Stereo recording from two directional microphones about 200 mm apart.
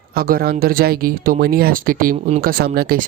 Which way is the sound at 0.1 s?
45° right (ahead or behind).